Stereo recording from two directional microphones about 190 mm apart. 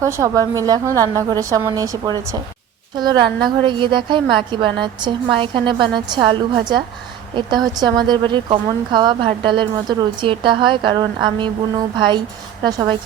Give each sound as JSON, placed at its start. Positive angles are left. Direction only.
{"t": 0.0, "sound": "speech", "side_deg": -15}